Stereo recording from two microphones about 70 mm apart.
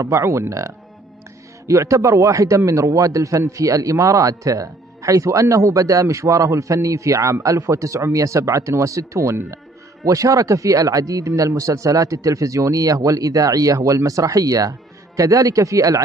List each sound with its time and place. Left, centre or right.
0.0 s a man's voice: right